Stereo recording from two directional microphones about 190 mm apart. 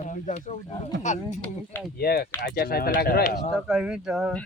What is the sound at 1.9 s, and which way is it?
Speech, 55° left (ahead or behind).